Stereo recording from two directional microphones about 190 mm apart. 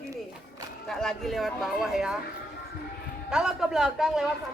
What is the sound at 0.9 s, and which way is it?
Speech, centre (ahead or behind).